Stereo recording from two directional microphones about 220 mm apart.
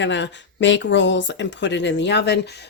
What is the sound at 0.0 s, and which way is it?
Speech, 55° left (ahead or behind).